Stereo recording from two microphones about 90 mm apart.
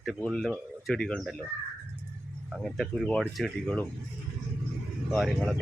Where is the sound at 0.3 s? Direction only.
5° left (ahead or behind).